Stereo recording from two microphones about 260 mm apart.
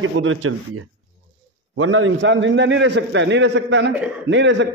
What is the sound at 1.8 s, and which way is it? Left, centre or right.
A man's voice, right.